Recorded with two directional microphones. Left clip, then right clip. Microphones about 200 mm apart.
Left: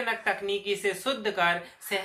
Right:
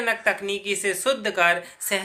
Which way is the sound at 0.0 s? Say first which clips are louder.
Right 5 dB; 40° right (ahead or behind).